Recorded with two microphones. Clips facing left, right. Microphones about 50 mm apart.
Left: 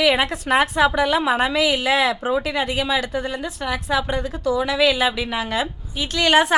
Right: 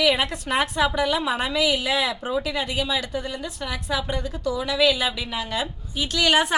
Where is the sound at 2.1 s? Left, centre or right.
Left.